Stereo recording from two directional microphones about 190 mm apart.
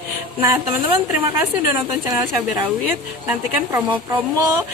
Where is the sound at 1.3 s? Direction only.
15° right (ahead or behind).